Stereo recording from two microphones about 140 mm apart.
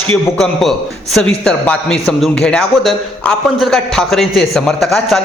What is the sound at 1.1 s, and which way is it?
A man's voice, 5° left (ahead or behind).